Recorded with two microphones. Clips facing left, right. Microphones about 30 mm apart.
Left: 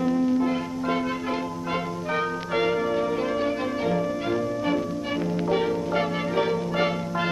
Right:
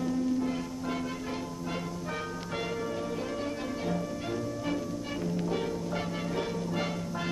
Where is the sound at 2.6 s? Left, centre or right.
Left.